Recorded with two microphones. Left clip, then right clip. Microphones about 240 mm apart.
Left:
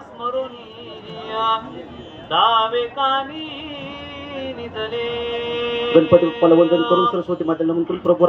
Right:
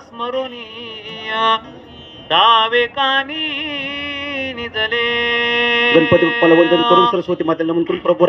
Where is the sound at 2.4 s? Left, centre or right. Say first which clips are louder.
Right 4 dB; right.